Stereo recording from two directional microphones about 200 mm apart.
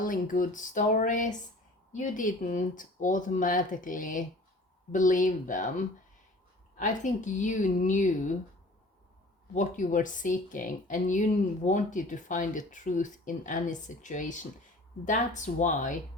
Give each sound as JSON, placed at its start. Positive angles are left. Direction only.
{"t": 0.0, "sound": "speech", "side_deg": 45}
{"t": 9.6, "sound": "speech", "side_deg": 40}